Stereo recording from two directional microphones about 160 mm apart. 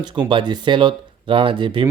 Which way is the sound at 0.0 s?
30° right (ahead or behind).